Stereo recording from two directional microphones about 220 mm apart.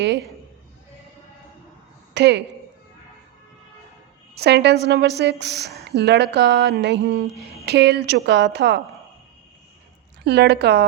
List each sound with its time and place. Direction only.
2.1 s a woman's voice: 50° right (ahead or behind)
4.4 s speech: 50° right (ahead or behind)
7.3 s a sound: centre (ahead or behind)
7.6 s speech: 50° right (ahead or behind)
10.2 s speech: 50° right (ahead or behind)